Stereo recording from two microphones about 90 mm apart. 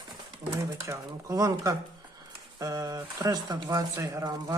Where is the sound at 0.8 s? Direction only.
35° right (ahead or behind).